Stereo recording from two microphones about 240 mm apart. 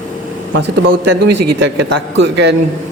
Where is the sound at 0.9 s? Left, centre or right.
Right.